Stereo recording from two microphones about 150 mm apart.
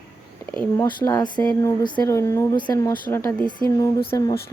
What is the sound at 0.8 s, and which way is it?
Speech, 25° left (ahead or behind).